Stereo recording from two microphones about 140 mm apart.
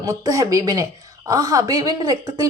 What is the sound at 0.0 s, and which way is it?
A woman's voice, 25° right (ahead or behind).